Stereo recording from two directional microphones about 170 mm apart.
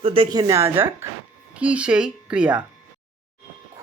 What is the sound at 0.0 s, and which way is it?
Speech, 30° right (ahead or behind).